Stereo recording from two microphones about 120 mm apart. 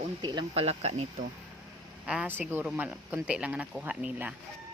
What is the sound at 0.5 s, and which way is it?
Speech, 60° right (ahead or behind).